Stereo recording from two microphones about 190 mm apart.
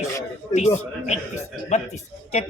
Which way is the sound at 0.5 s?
35° left (ahead or behind).